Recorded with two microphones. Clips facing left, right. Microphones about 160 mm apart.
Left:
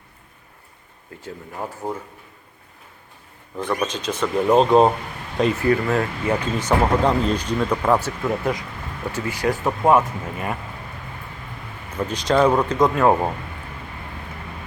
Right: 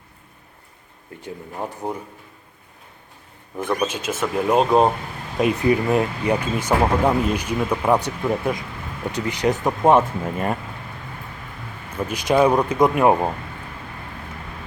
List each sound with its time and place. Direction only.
1.2 s speech: 15° right (ahead or behind)
3.5 s speech: 10° right (ahead or behind)
5.4 s speech: 15° right (ahead or behind)
12.0 s speech: 10° right (ahead or behind)